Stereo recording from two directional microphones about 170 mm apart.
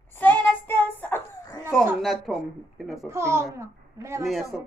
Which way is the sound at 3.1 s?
15° right (ahead or behind).